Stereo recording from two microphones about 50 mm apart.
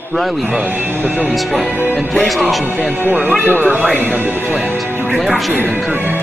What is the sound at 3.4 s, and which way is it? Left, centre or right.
Speech, right.